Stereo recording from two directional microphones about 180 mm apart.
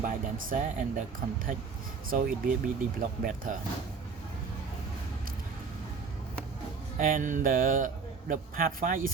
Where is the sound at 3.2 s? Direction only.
50° right (ahead or behind).